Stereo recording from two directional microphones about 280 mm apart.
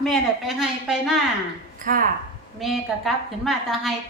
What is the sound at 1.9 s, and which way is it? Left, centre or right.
Speech, right.